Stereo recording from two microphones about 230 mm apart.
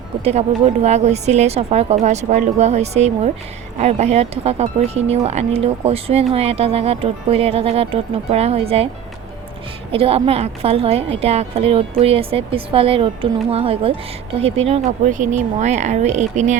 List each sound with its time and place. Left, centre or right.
0.3 s speech: right
9.9 s speech: right